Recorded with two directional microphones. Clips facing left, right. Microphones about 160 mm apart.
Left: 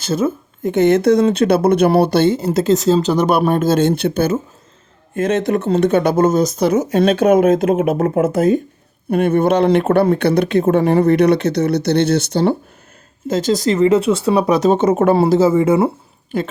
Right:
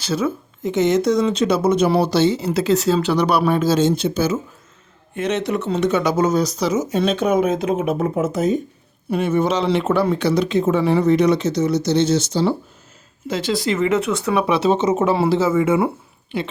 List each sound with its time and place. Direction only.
0.0 s speech: 50° left (ahead or behind)
13.2 s speech: 45° left (ahead or behind)
15.2 s a woman's voice: 40° left (ahead or behind)